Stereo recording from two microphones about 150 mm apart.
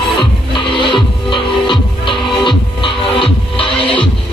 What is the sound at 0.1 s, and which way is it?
Music, 35° left (ahead or behind).